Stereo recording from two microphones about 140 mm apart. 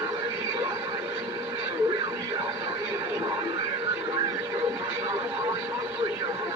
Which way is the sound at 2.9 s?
30° right (ahead or behind).